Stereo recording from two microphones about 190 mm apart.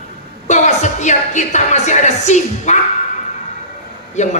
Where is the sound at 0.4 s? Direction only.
40° left (ahead or behind).